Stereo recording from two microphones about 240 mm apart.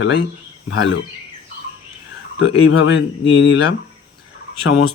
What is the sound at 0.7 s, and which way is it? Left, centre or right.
Speech, left.